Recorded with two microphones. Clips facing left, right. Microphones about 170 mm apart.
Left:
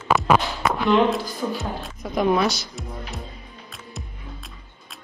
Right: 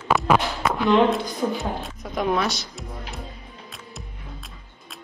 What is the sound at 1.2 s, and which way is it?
Speech, 20° right (ahead or behind).